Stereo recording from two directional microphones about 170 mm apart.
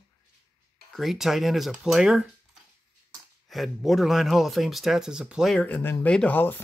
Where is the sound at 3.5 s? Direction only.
Centre (ahead or behind).